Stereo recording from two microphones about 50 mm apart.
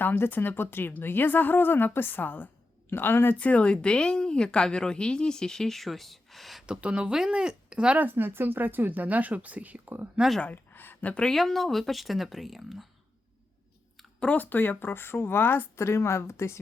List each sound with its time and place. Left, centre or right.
0.0 s a woman's voice: left
3.3 s speech: left; by 6.7 s centre
6.7 s speech: centre
7.9 s speech: right
10.5 s a sound: left
11.2 s speech: centre
14.2 s a woman's voice: left